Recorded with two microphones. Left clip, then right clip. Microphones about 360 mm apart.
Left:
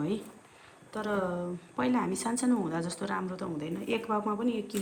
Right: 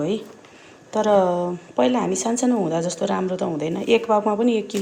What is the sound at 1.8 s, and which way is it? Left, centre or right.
A woman's voice, centre.